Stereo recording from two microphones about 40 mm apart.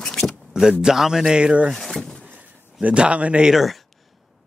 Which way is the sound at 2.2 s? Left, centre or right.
Right.